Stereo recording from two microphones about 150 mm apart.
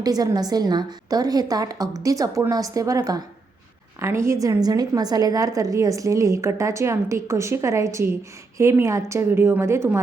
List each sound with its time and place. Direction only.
0.0 s a woman's voice: 25° right (ahead or behind)